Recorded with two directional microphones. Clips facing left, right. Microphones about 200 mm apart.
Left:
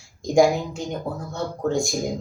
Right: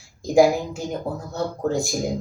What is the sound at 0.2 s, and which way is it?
A woman's voice, 5° right (ahead or behind).